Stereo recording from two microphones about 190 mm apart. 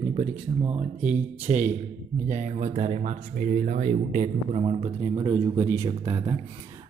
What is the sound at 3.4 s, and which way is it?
Speech, 50° right (ahead or behind).